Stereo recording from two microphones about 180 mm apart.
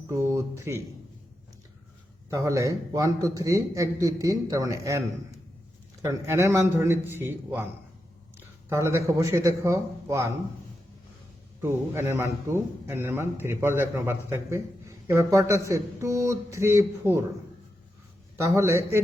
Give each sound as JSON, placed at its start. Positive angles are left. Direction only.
{"t": 0.1, "sound": "a man's voice", "side_deg": -15}
{"t": 2.3, "sound": "a man's voice", "side_deg": -15}
{"t": 8.7, "sound": "a man's voice", "side_deg": -15}
{"t": 11.6, "sound": "a man's voice", "side_deg": -15}
{"t": 18.3, "sound": "a man's voice", "side_deg": -15}